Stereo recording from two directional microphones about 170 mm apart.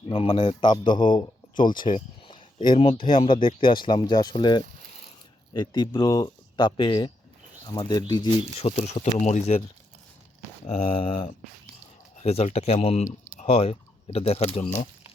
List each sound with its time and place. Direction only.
0.1 s a man's voice: 30° left (ahead or behind)
1.7 s speech: 55° left (ahead or behind)
2.2 s a sound: 30° left (ahead or behind)
3.0 s a man's voice: 30° left (ahead or behind)
8.5 s speech: 35° left (ahead or behind)
10.7 s speech: 35° left (ahead or behind)